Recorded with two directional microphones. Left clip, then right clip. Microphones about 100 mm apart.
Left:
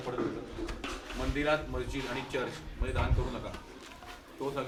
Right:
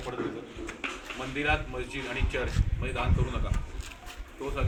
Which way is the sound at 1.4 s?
20° left (ahead or behind).